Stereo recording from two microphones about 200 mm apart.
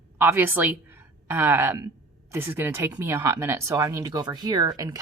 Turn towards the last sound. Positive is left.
turn(degrees=-20)  # may be behind; listen again after turning